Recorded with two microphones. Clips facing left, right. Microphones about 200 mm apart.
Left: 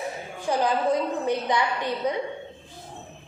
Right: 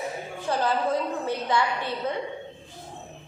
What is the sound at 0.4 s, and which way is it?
A woman's voice, 15° left (ahead or behind).